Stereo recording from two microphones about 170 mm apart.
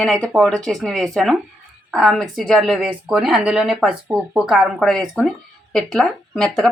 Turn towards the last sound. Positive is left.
turn(degrees=5)  # may be behind; listen again after turning